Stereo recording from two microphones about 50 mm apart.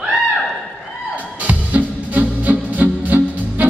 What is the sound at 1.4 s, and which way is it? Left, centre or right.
Music, right.